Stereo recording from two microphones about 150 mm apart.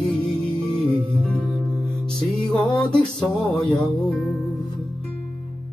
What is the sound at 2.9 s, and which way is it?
Music, 5° left (ahead or behind).